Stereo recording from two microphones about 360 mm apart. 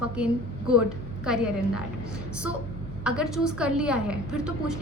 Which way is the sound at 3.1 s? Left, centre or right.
Centre.